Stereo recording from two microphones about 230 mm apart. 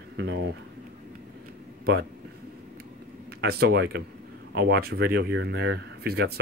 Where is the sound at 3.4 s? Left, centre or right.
Right.